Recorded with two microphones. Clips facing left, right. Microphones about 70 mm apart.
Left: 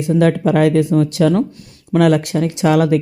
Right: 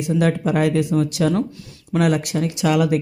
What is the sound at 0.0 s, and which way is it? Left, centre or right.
Speech, left.